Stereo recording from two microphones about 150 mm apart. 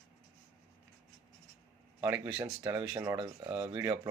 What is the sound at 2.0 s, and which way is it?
Speech, 10° right (ahead or behind).